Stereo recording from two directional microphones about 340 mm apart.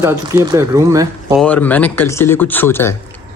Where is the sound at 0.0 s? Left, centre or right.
Centre.